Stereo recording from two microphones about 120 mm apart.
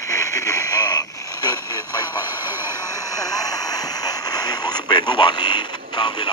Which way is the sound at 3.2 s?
30° left (ahead or behind).